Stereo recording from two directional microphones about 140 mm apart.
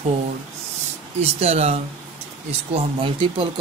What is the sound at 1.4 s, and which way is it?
Speech, 50° right (ahead or behind).